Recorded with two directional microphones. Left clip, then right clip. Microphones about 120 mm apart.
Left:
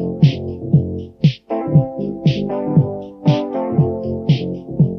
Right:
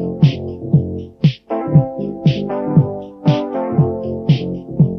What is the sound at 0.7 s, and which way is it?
Music, 45° left (ahead or behind).